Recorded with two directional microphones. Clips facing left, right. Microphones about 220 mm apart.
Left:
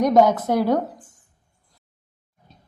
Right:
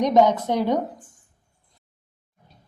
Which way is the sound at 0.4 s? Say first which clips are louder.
Left 2 dB; 10° left (ahead or behind).